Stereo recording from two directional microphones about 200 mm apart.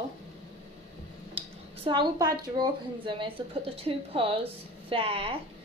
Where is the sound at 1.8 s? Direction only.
20° right (ahead or behind).